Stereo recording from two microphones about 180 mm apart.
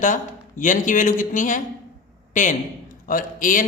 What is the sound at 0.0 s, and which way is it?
A man's voice, 45° left (ahead or behind).